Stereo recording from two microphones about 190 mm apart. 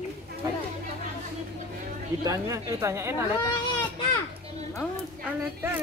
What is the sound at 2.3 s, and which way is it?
Speech, 15° right (ahead or behind).